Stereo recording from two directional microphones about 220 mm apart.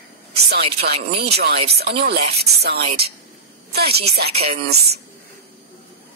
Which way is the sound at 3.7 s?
45° right (ahead or behind).